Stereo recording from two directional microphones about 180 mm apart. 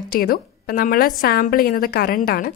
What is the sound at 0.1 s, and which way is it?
A woman's voice, 55° left (ahead or behind).